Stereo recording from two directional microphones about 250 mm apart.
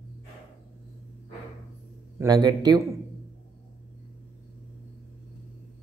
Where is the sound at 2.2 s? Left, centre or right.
Centre.